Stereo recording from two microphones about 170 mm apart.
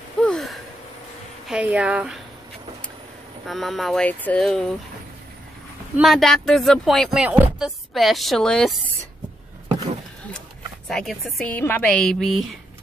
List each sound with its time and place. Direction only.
0.2 s a sound: 5° left (ahead or behind)
1.5 s a woman's voice: 5° right (ahead or behind)
3.4 s speech: centre (ahead or behind)
5.9 s speech: centre (ahead or behind)
10.9 s speech: centre (ahead or behind)